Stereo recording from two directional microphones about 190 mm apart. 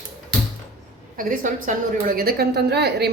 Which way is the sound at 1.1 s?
45° right (ahead or behind).